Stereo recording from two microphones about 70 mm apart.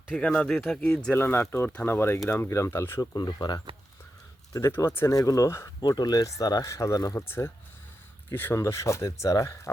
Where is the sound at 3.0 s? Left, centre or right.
Left.